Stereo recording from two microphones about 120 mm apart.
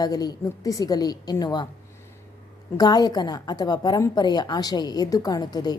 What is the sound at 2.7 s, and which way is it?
A woman's voice, 35° left (ahead or behind).